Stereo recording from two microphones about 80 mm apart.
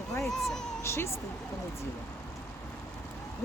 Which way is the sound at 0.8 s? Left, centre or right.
Left.